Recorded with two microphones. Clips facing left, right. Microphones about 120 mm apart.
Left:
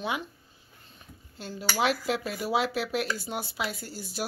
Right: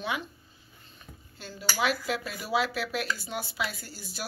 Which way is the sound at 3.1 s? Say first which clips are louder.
Left 1 dB; 45° left (ahead or behind).